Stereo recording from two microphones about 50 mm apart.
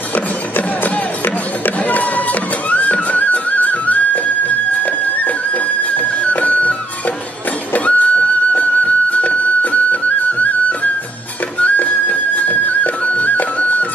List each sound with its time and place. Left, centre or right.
0.1 s music: left
7.7 s music: left